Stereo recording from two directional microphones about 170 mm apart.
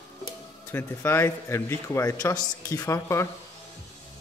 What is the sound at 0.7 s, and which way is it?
A man's voice, 15° left (ahead or behind).